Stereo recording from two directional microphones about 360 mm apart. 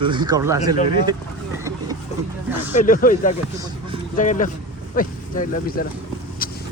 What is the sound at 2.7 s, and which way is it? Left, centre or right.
Speech, left.